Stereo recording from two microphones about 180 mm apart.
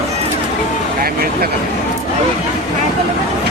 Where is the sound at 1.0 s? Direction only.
55° right (ahead or behind).